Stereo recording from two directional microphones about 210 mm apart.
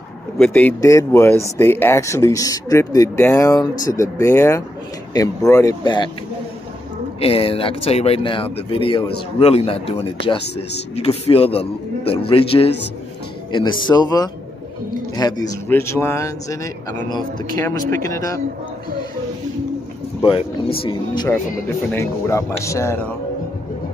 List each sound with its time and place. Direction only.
0.4 s speech: 10° left (ahead or behind)
7.2 s speech: 25° left (ahead or behind)
11.0 s speech: 30° left (ahead or behind)
20.2 s speech: 25° left (ahead or behind)
22.6 s speech: 15° left (ahead or behind)